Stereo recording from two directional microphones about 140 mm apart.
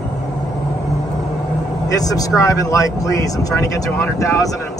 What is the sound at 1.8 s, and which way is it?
Speech, 25° left (ahead or behind).